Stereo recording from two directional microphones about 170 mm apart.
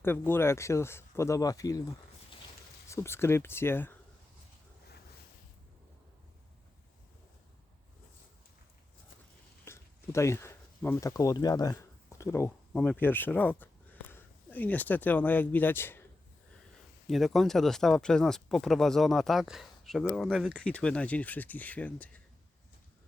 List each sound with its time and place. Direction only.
0.0 s speech: 15° left (ahead or behind)
2.9 s speech: 15° left (ahead or behind)
9.6 s speech: 15° left (ahead or behind)
17.1 s speech: centre (ahead or behind)